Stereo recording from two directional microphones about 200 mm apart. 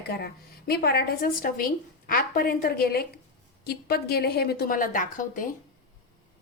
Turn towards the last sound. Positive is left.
turn(degrees=40)  # may be behind; listen again after turning